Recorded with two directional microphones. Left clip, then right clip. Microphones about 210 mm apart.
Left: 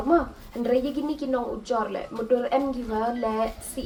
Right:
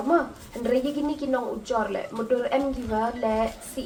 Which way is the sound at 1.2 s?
45° left (ahead or behind).